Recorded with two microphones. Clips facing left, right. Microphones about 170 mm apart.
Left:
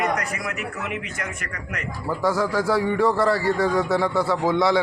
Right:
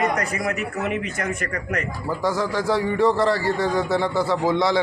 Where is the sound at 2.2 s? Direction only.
Centre (ahead or behind).